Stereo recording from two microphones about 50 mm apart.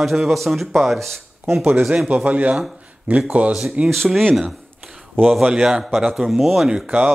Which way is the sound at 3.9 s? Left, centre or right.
Centre.